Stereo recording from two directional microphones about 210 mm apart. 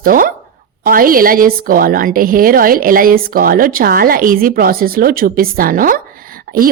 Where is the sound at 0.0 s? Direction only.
40° right (ahead or behind).